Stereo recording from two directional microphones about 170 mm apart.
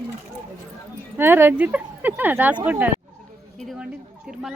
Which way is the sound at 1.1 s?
10° right (ahead or behind).